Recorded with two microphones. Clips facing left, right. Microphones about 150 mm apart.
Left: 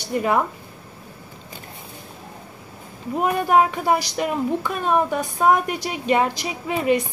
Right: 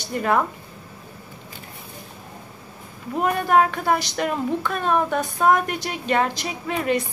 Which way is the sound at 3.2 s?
10° left (ahead or behind).